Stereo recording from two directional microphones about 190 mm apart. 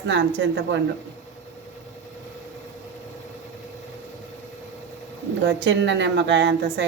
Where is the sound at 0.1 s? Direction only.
70° right (ahead or behind).